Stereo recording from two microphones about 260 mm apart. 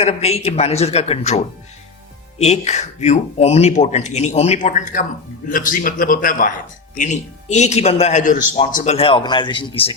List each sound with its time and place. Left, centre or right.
0.0 s speech: left
2.4 s a man's voice: left